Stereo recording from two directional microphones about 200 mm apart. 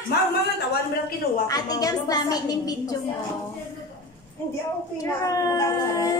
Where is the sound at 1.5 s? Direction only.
20° left (ahead or behind).